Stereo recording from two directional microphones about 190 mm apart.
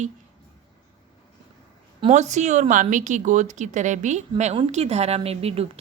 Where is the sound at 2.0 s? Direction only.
35° right (ahead or behind).